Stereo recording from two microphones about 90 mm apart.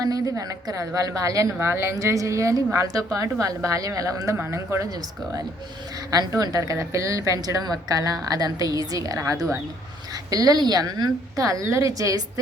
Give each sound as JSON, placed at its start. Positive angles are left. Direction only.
{"t": 0.0, "sound": "a woman's voice", "side_deg": -40}
{"t": 1.5, "sound": "a woman's voice", "side_deg": -25}
{"t": 6.1, "sound": "a woman's voice", "side_deg": -45}